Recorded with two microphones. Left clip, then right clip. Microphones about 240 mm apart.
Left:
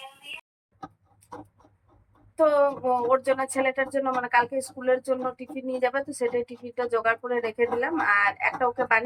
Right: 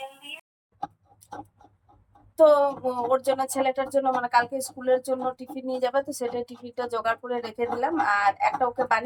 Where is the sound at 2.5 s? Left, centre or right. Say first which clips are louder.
Left 2 dB; centre.